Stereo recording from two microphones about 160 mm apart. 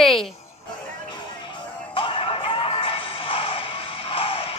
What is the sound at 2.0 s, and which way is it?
Music, 35° left (ahead or behind).